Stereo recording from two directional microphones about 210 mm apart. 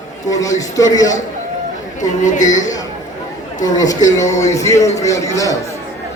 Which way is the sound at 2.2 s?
35° left (ahead or behind).